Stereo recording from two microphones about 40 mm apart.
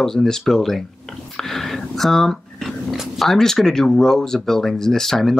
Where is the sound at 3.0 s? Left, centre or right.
Centre.